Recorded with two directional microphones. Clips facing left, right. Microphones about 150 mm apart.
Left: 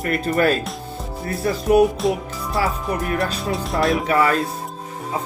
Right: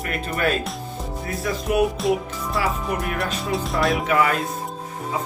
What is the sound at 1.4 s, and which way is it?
Speech, 35° left (ahead or behind).